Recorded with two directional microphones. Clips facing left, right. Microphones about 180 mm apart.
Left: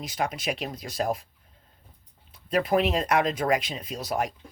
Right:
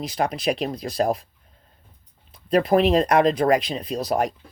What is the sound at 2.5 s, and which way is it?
Speech, 35° right (ahead or behind).